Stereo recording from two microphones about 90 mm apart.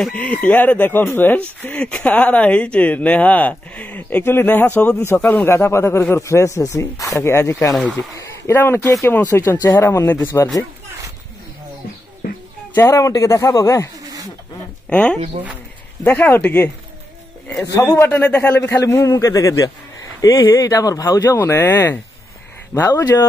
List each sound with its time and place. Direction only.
0.0 s a man's voice: 15° left (ahead or behind)
5.6 s speech: 30° left (ahead or behind)
5.9 s a man's voice: 20° left (ahead or behind)
6.1 s speech: 35° left (ahead or behind)
12.7 s speech: 30° left (ahead or behind)
14.9 s a man's voice: 15° left (ahead or behind)
17.7 s a man's voice: 30° left (ahead or behind)
18.6 s a man's voice: 30° left (ahead or behind)